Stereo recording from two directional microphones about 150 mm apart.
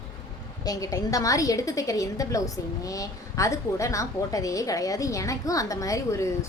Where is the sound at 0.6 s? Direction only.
25° left (ahead or behind).